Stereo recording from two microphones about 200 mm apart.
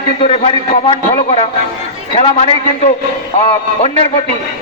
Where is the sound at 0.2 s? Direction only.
25° left (ahead or behind).